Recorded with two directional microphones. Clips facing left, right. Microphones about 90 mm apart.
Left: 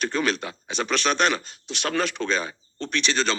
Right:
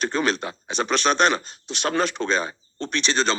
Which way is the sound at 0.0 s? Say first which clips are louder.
Right 2 dB; 30° right (ahead or behind).